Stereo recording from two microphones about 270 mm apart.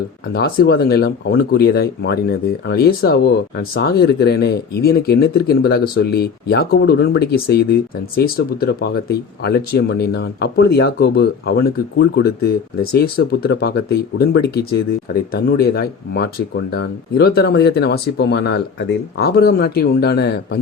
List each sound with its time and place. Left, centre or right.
0.3 s speech: left